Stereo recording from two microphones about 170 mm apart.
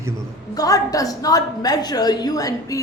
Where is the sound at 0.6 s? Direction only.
20° left (ahead or behind).